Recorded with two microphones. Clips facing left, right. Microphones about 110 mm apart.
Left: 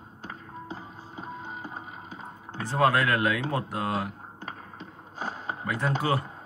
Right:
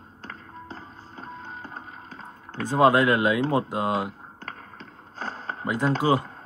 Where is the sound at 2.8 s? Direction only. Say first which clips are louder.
Right 5 dB; 20° right (ahead or behind).